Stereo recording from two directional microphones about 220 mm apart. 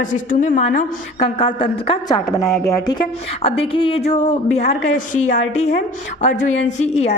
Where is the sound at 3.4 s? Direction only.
25° left (ahead or behind).